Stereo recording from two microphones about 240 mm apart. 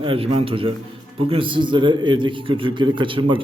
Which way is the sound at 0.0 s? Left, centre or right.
Right.